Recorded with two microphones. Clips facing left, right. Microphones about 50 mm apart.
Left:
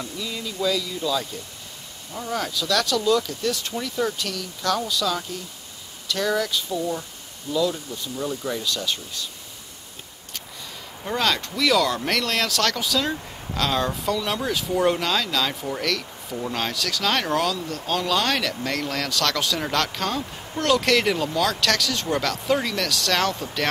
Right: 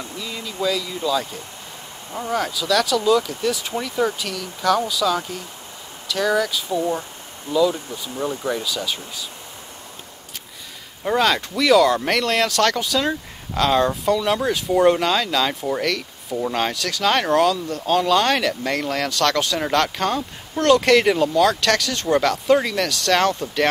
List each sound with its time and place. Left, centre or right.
0.2 s speech: centre
2.3 s speech: centre
6.7 s speech: right
7.5 s speech: centre
8.2 s speech: right
8.6 s speech: centre
11.1 s speech: centre